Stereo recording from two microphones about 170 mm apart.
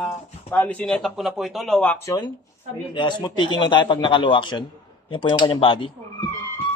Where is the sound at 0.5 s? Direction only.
10° left (ahead or behind).